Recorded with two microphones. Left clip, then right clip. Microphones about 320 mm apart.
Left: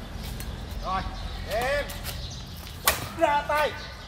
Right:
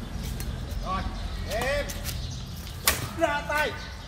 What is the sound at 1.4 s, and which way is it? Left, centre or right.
Speech, centre.